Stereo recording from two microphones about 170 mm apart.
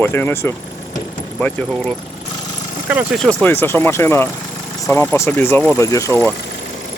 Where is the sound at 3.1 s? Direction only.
10° left (ahead or behind).